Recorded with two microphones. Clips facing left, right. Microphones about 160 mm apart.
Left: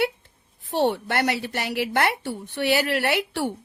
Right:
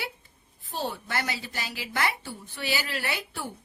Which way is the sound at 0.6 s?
70° left (ahead or behind).